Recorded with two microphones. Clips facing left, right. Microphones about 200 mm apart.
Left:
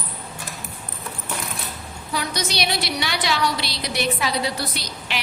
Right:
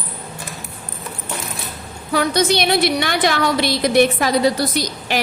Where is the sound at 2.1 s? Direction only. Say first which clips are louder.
Right 9 dB; 55° right (ahead or behind).